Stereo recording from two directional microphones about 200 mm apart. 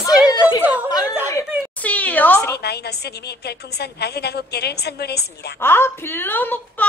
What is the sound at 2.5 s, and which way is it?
A woman's voice, 55° left (ahead or behind).